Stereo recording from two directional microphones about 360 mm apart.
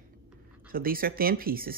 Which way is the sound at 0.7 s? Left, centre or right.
Right.